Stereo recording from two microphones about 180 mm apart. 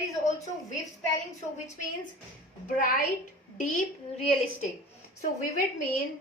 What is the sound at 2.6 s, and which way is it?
Speech, 50° left (ahead or behind).